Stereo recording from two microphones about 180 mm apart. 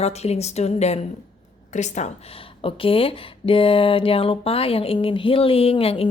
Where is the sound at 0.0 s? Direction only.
35° left (ahead or behind).